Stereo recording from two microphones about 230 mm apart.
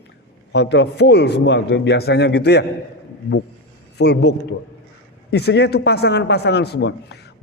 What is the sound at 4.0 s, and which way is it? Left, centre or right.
A man's voice, left.